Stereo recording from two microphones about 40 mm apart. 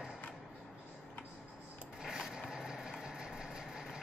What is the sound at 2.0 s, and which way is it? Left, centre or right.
Vehicle, centre.